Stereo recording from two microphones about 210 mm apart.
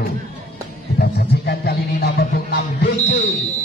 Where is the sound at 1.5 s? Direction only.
50° left (ahead or behind).